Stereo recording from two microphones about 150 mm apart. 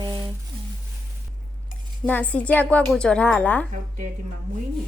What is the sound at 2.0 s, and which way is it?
A woman's voice, 10° left (ahead or behind).